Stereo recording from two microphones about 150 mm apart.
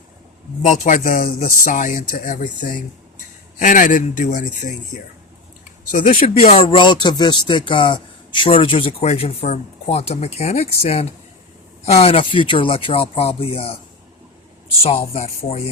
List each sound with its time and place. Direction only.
0.6 s speech: 60° left (ahead or behind)
5.9 s speech: 55° left (ahead or behind); by 13.7 s 40° left (ahead or behind)
14.8 s speech: 40° left (ahead or behind)